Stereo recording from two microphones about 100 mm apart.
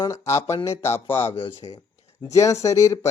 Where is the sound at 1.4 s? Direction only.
60° left (ahead or behind).